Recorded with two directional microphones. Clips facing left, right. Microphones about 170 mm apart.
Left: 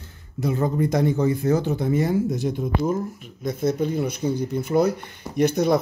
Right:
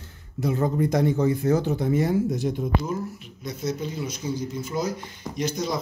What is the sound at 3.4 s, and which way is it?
Speech, 55° left (ahead or behind).